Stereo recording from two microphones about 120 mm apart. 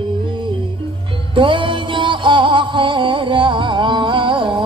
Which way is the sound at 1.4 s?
45° right (ahead or behind).